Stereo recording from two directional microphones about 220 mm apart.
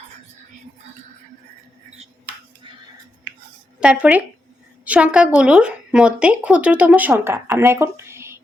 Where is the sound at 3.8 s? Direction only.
5° right (ahead or behind).